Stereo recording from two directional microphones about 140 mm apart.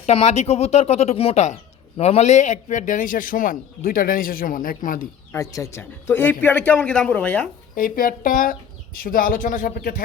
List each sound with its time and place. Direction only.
0.0 s a man's voice: 50° left (ahead or behind); by 5.0 s 80° left
5.3 s speech: 25° left (ahead or behind); by 7.5 s 10° left (ahead or behind)
7.8 s speech: 85° left